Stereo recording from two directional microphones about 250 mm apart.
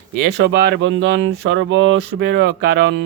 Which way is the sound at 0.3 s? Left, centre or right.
Right.